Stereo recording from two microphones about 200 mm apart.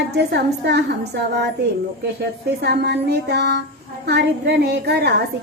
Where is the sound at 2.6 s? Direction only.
55° right (ahead or behind).